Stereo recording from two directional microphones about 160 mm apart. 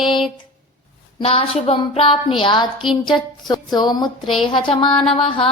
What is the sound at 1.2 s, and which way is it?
A woman's voice, 35° left (ahead or behind).